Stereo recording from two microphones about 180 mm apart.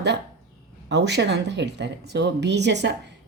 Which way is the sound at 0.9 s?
70° right (ahead or behind).